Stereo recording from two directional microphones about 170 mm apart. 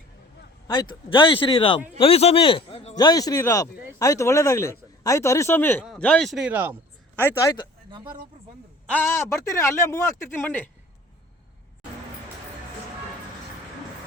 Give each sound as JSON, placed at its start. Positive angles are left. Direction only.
{"t": 0.7, "sound": "a man's voice", "side_deg": 25}
{"t": 2.9, "sound": "speech", "side_deg": 25}
{"t": 7.2, "sound": "speech", "side_deg": 15}
{"t": 8.9, "sound": "speech", "side_deg": 10}